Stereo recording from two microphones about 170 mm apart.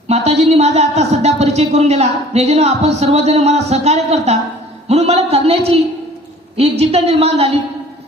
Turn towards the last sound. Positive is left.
turn(degrees=-35)  # may be behind; listen again after turning